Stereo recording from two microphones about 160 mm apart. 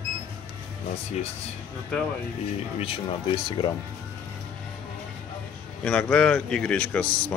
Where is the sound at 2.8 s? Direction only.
35° left (ahead or behind).